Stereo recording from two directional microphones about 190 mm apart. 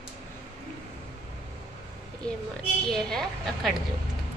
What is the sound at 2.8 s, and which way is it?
Speech, 5° left (ahead or behind).